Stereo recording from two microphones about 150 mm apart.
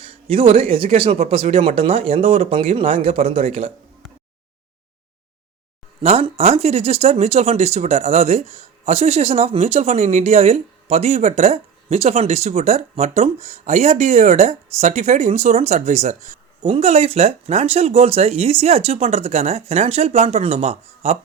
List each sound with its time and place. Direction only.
0.0 s speech: 40° right (ahead or behind)
6.0 s speech: 40° right (ahead or behind)